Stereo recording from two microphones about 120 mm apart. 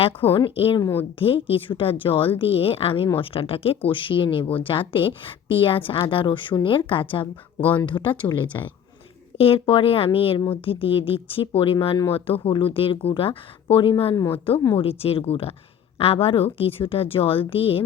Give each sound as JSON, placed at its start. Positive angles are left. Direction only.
{"t": 0.3, "sound": "a woman's voice", "side_deg": 50}
{"t": 0.8, "sound": "a woman's voice", "side_deg": 20}
{"t": 1.2, "sound": "a woman's voice", "side_deg": 50}
{"t": 8.5, "sound": "a woman's voice", "side_deg": 30}
{"t": 9.4, "sound": "a woman's voice", "side_deg": 50}
{"t": 14.2, "sound": "a woman's voice", "side_deg": 20}
{"t": 14.8, "sound": "a woman's voice", "side_deg": 55}